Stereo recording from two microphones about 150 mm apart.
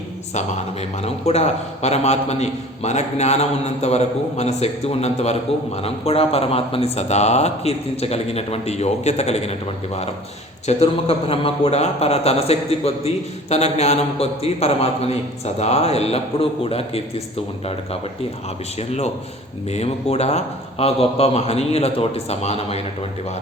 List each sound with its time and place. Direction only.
1.0 s a man's voice: 45° left (ahead or behind)
18.8 s a man's voice: 45° left (ahead or behind)